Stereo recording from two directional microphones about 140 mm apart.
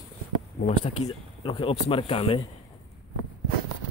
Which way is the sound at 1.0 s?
55° left (ahead or behind).